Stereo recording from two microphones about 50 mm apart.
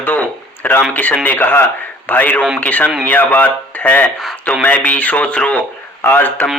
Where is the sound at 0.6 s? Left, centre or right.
Left.